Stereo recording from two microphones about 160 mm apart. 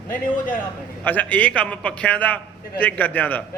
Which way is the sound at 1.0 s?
10° left (ahead or behind).